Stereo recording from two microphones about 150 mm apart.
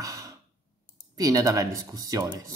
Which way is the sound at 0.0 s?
20° right (ahead or behind).